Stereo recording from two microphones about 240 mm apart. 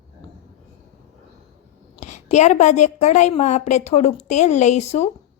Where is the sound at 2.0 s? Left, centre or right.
Left.